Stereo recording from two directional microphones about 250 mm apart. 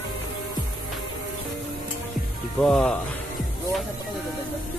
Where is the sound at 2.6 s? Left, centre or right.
Centre.